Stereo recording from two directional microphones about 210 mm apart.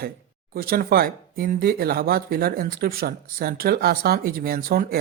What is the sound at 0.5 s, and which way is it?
Speech, 45° right (ahead or behind).